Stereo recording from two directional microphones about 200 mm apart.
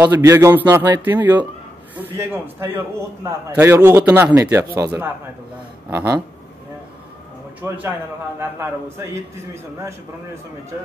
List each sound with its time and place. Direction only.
0.0 s speech: 10° right (ahead or behind)
7.6 s speech: 10° right (ahead or behind)